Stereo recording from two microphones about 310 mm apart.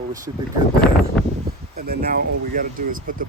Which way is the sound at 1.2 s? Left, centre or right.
Centre.